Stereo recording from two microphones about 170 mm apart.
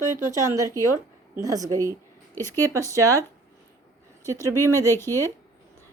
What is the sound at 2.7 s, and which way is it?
Speech, 20° right (ahead or behind).